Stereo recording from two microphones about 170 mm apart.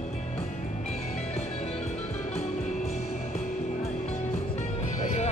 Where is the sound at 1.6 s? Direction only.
40° left (ahead or behind).